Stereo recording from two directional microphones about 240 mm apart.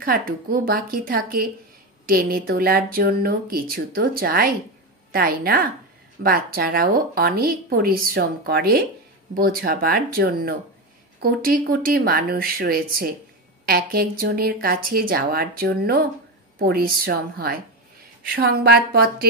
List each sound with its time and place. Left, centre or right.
0.0 s a woman's voice: right